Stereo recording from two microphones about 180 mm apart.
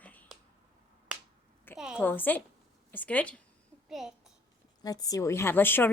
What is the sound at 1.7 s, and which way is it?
Speech, 5° right (ahead or behind).